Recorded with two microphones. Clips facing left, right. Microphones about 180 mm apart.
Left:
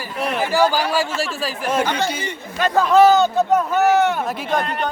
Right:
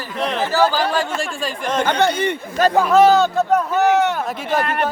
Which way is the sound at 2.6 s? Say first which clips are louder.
Right 5 dB; 45° right (ahead or behind).